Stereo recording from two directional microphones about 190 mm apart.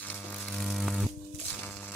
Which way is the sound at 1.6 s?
10° left (ahead or behind).